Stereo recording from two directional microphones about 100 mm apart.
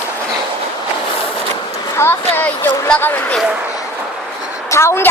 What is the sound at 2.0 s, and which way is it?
Speech, 20° left (ahead or behind).